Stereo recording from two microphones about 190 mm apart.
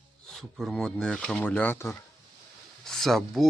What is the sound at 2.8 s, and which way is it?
Speech, centre (ahead or behind).